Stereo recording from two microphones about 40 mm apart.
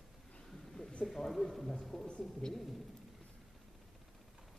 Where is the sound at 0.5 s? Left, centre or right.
Centre.